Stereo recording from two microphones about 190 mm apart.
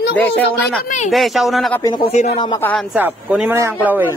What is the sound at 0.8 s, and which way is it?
Speech, 40° left (ahead or behind).